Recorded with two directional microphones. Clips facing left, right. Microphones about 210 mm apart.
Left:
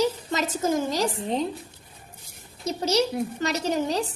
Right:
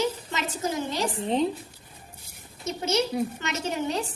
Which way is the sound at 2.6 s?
35° left (ahead or behind).